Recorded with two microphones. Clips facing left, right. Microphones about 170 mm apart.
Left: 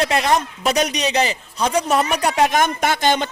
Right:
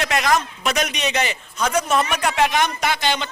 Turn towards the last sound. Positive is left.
turn(degrees=50)  # may be behind; listen again after turning